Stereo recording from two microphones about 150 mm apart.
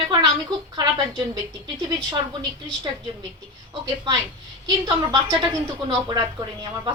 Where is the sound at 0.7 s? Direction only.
30° right (ahead or behind).